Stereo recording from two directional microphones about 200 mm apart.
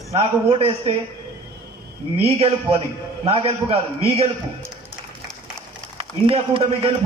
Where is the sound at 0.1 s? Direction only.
30° right (ahead or behind).